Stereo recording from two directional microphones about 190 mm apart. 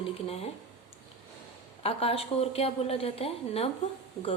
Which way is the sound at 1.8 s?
30° left (ahead or behind).